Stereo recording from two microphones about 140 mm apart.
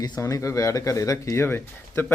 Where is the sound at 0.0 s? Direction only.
25° left (ahead or behind).